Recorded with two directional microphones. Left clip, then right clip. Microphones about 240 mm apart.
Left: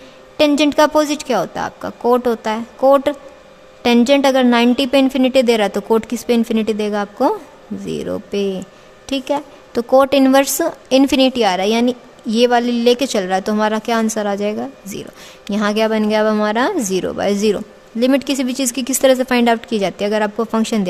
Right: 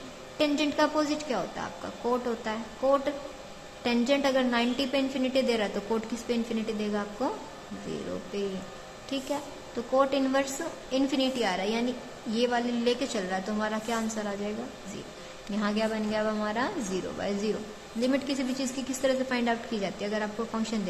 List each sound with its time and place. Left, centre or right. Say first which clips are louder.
0.3 s a woman's voice: left 14 dB; left
9.0 s a woman's voice: left 13 dB; left